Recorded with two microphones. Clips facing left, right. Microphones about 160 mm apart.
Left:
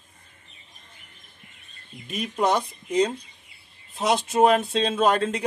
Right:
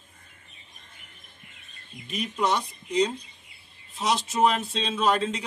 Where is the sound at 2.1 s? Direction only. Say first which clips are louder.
Left 3 dB; 50° left (ahead or behind).